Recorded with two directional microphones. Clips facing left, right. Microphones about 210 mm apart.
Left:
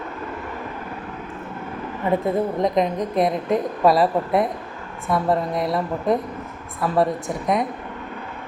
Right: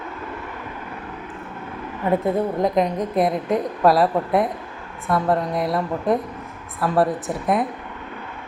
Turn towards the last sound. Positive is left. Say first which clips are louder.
# right 1 dB
turn(degrees=-5)  # may be behind; listen again after turning